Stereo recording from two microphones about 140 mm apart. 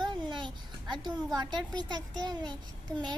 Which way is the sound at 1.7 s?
30° right (ahead or behind).